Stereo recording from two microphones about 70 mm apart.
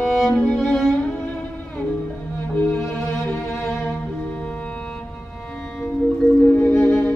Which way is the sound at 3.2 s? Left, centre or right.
Centre.